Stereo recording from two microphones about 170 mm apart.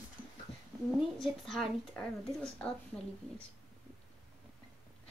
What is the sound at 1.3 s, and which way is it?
A woman's voice, centre (ahead or behind).